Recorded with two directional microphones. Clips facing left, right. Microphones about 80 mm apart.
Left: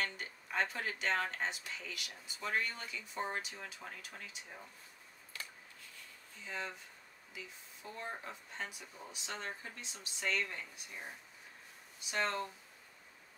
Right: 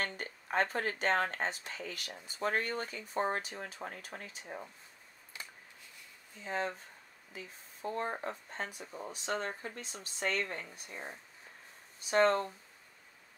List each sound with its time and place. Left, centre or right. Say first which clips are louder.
0.0 s speech: right 2 dB; right
5.3 s a sound: even; centre
6.4 s speech: right 7 dB; right